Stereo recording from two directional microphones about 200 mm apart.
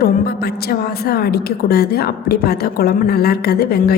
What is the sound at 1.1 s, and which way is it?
A woman's voice, 50° left (ahead or behind).